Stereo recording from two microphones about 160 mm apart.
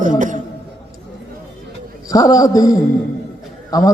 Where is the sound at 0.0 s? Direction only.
55° right (ahead or behind).